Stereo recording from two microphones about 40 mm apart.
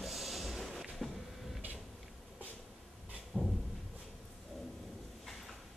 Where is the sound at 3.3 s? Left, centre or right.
Centre.